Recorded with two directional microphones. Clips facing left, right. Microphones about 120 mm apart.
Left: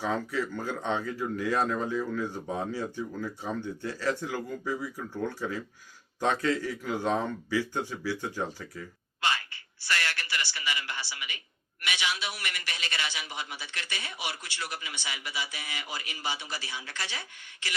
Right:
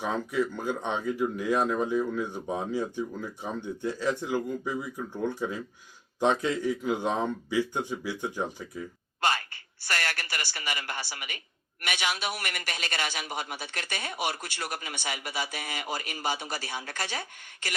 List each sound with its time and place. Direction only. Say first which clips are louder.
0.0 s speech: right 2 dB; 15° right (ahead or behind)
9.2 s a man's voice: right 3 dB; 45° right (ahead or behind)
9.8 s a sound: even; 45° right (ahead or behind)
11.8 s a man's voice: right 2 dB; 45° right (ahead or behind)